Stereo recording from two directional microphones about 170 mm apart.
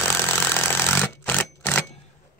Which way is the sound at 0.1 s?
10° left (ahead or behind).